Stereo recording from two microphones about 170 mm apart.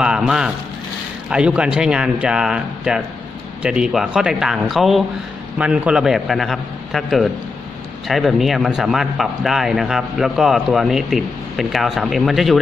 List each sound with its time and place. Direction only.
0.0 s a man's voice: 5° right (ahead or behind)